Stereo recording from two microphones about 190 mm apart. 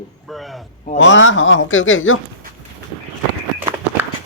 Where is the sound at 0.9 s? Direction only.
75° left (ahead or behind).